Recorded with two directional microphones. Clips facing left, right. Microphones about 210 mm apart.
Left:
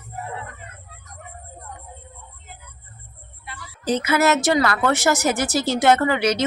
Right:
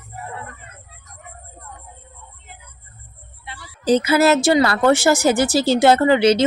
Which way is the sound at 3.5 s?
30° right (ahead or behind).